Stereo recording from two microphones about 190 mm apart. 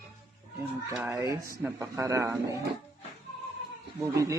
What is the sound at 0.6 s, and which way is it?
A man's voice, 10° right (ahead or behind).